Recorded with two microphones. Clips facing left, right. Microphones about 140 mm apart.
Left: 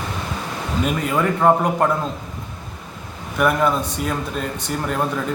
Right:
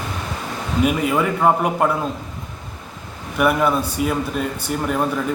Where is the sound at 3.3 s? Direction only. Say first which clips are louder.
Right 1 dB; 5° right (ahead or behind).